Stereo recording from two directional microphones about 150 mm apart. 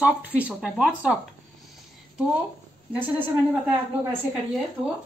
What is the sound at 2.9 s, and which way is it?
Speech, 10° right (ahead or behind).